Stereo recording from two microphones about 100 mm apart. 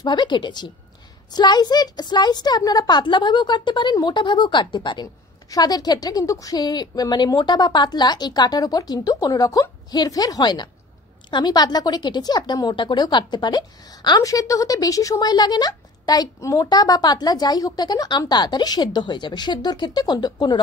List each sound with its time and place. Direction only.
0.0 s speech: 45° left (ahead or behind)
5.5 s a woman's voice: 40° left (ahead or behind)
14.2 s speech: 35° left (ahead or behind)